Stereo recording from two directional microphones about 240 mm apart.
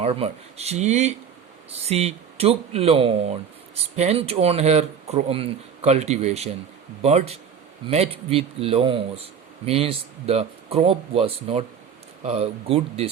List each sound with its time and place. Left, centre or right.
0.0 s speech: right